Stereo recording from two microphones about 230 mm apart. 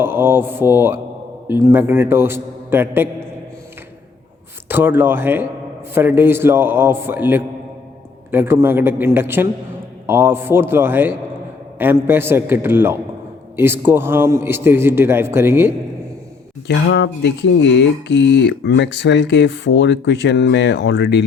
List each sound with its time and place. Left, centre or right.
0.0 s mantra: centre
1.5 s a man's voice: centre
4.7 s a man's voice: centre
16.6 s speech: left